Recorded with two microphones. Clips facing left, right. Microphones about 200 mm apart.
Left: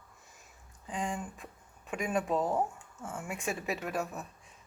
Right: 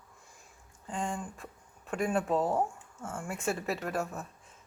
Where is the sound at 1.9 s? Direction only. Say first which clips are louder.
Right 2 dB; 15° left (ahead or behind).